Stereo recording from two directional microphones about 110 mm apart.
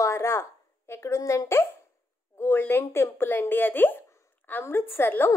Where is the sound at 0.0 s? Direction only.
25° left (ahead or behind).